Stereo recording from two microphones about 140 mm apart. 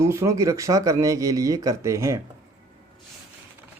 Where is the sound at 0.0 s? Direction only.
20° right (ahead or behind).